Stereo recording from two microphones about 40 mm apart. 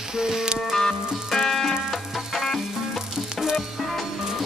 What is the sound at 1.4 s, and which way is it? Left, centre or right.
Music, centre.